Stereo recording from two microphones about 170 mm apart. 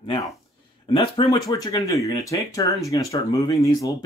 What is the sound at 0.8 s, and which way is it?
Speech, 30° left (ahead or behind).